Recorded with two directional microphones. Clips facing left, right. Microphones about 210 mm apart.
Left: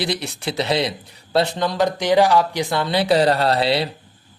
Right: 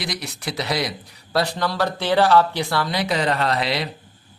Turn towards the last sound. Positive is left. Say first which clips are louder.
# left 4 dB
turn(degrees=30)  # may be behind; listen again after turning